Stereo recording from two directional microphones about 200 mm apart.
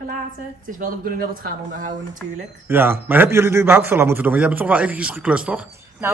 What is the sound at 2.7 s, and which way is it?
A woman's voice, 10° right (ahead or behind).